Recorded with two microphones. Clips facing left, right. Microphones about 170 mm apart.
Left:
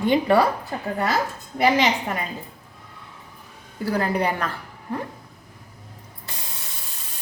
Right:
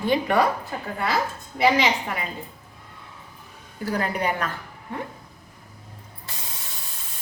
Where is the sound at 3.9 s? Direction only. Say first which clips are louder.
Left 3 dB; 30° left (ahead or behind).